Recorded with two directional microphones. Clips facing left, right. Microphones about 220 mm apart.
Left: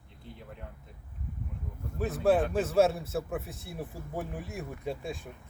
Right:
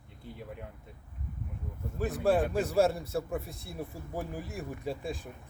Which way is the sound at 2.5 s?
Centre (ahead or behind).